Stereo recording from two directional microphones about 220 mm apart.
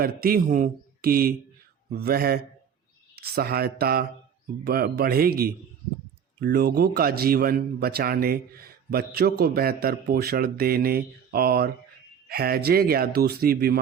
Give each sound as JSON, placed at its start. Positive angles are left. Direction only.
{"t": 0.0, "sound": "a man's voice", "side_deg": -45}